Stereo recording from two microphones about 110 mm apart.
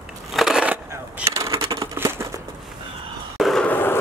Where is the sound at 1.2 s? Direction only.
30° right (ahead or behind).